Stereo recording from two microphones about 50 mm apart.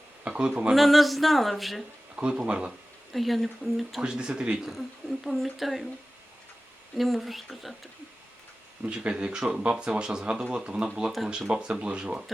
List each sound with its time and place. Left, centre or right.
0.3 s a sound: centre
0.8 s speech: centre
2.1 s speech: centre
3.1 s speech: centre
4.0 s speech: centre
4.6 s speech: centre
6.9 s speech: centre
8.8 s speech: centre